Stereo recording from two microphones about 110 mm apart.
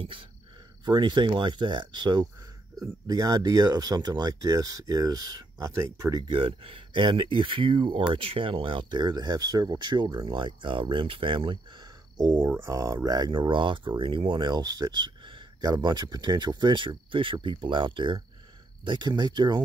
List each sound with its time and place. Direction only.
0.8 s speech: 40° right (ahead or behind)
6.2 s speech: 55° right (ahead or behind)
12.4 s speech: 20° right (ahead or behind); by 19.6 s 45° right (ahead or behind)